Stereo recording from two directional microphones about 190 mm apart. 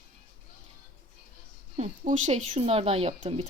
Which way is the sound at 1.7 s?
40° right (ahead or behind).